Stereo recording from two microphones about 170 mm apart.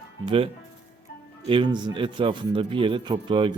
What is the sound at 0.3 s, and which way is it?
Speech, 35° right (ahead or behind).